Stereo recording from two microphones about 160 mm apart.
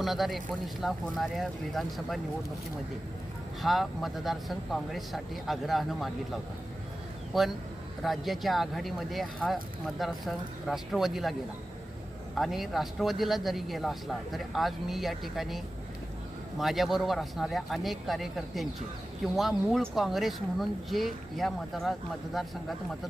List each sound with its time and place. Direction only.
0.0 s speech: centre (ahead or behind)
3.6 s speech: centre (ahead or behind)
7.3 s speech: centre (ahead or behind)
12.4 s speech: centre (ahead or behind)